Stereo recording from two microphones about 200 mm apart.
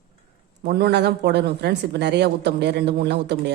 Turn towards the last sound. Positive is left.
turn(degrees=-60)  # may be behind; listen again after turning